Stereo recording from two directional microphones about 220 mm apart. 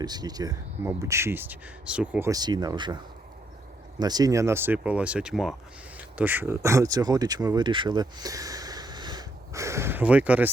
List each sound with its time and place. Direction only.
0.0 s speech: 20° right (ahead or behind)
4.0 s speech: 15° right (ahead or behind)